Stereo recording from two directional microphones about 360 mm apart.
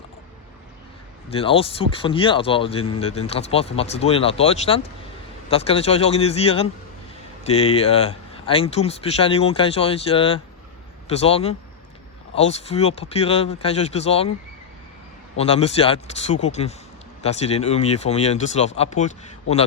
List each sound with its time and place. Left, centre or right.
1.3 s speech: centre
15.4 s speech: centre